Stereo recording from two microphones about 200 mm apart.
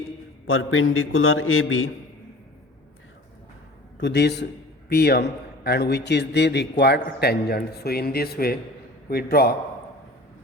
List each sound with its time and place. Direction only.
0.4 s a man's voice: 80° left
3.9 s a man's voice: 60° left (ahead or behind)